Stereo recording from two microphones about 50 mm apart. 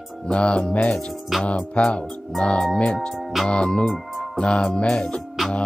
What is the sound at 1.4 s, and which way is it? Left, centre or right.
Speech, centre.